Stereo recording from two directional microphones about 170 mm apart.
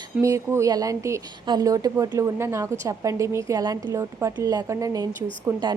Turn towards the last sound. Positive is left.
turn(degrees=-15)  # may be behind; listen again after turning